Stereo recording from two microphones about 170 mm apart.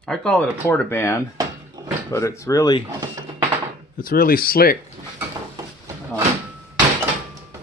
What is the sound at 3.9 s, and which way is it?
Speech, 55° left (ahead or behind).